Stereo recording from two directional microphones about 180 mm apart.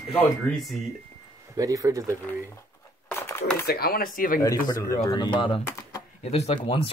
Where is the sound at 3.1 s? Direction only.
15° left (ahead or behind).